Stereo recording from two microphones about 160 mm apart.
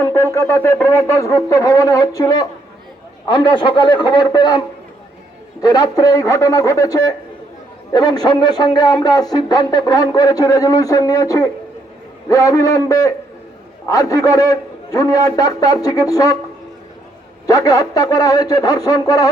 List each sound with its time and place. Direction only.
0.0 s speech: 15° left (ahead or behind)
5.6 s speech: 25° left (ahead or behind)
17.4 s speech: 20° left (ahead or behind)